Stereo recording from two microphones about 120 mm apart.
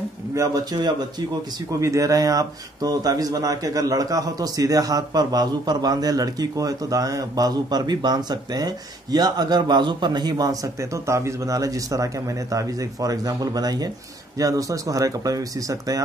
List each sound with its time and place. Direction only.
0.3 s speech: 30° right (ahead or behind)